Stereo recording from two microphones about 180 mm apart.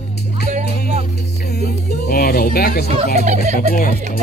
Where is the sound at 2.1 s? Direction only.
55° left (ahead or behind).